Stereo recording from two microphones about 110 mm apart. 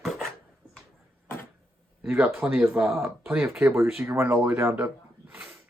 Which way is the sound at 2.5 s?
20° right (ahead or behind).